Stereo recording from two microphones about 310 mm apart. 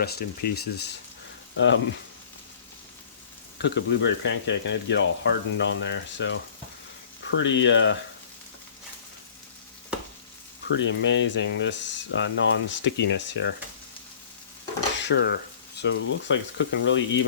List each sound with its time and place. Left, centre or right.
0.0 s speech: left
3.6 s speech: left
10.8 s speech: left
14.9 s speech: left